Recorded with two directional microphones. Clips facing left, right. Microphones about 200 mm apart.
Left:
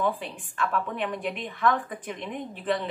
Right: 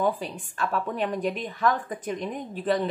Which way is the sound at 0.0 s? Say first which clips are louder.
Right 2 dB; 40° right (ahead or behind).